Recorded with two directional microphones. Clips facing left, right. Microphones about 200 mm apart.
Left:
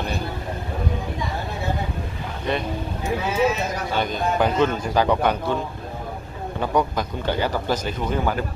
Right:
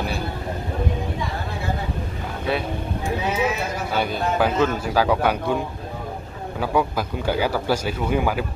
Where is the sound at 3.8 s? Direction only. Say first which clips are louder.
Even; 5° right (ahead or behind).